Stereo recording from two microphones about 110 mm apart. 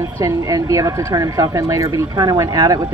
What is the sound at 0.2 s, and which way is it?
Speech, 30° right (ahead or behind).